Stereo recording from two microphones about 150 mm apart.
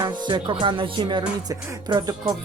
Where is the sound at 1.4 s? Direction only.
30° right (ahead or behind).